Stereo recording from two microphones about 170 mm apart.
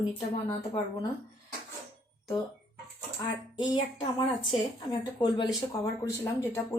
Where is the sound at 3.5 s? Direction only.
25° left (ahead or behind).